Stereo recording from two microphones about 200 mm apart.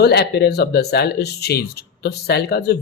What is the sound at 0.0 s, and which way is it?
Speech, 55° left (ahead or behind).